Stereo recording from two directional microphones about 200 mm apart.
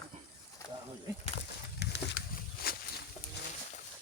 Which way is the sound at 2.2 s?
45° left (ahead or behind).